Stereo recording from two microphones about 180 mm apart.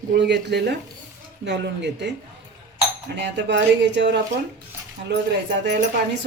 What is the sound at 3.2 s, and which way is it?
A woman's voice, 75° right (ahead or behind).